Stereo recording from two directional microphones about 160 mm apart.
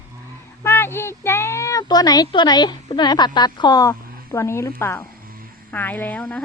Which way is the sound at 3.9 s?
15° left (ahead or behind).